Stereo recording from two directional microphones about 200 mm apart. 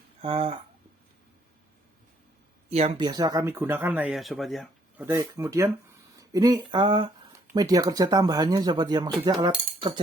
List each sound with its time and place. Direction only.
0.2 s speech: 30° right (ahead or behind)
2.6 s speech: 30° right (ahead or behind); by 5.0 s centre (ahead or behind)
5.0 s speech: 15° right (ahead or behind)